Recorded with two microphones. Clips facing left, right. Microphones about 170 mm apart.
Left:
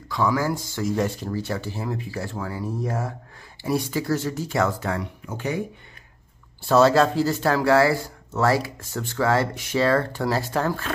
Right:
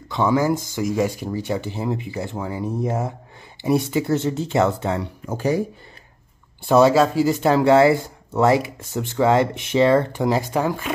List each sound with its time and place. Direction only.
0.1 s speech: 20° right (ahead or behind)
5.2 s speech: 40° right (ahead or behind)
6.6 s speech: 15° right (ahead or behind)